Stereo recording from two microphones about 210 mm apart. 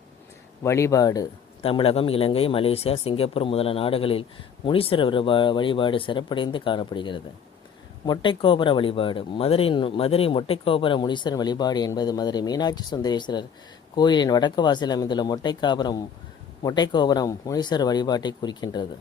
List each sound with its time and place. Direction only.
0.6 s speech: 15° left (ahead or behind)